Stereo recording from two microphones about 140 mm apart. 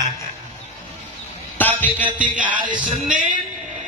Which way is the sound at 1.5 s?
10° left (ahead or behind).